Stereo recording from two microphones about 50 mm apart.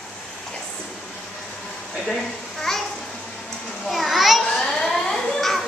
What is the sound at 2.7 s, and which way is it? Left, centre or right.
Babbling, centre.